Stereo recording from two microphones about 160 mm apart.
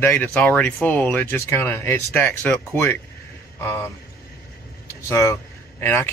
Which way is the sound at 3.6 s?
20° left (ahead or behind).